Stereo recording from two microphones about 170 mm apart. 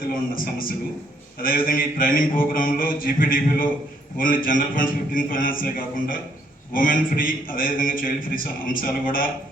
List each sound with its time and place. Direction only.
0.1 s a man's voice: 55° left (ahead or behind)